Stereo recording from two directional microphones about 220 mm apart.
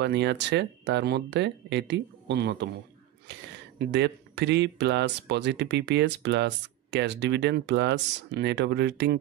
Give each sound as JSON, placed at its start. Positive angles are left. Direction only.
{"t": 0.0, "sound": "speech", "side_deg": -50}
{"t": 3.9, "sound": "speech", "side_deg": -50}